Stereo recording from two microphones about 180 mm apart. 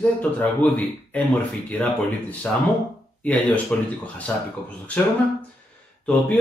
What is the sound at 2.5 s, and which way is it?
Speech, 5° left (ahead or behind).